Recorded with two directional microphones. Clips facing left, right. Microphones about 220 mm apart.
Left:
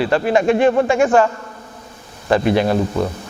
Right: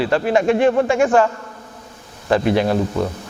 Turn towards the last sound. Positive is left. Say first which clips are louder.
# left 1 dB
turn(degrees=20)  # may be behind; listen again after turning